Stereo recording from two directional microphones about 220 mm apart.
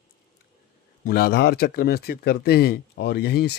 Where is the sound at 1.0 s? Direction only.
40° left (ahead or behind).